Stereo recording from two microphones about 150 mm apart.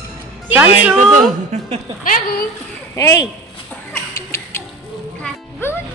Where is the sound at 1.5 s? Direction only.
50° right (ahead or behind).